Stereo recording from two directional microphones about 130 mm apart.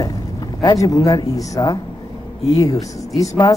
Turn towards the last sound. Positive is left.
turn(degrees=25)  # may be behind; listen again after turning